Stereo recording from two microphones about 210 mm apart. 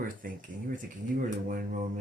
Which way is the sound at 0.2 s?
40° right (ahead or behind).